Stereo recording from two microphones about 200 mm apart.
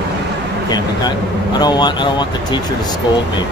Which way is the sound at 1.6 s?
20° left (ahead or behind).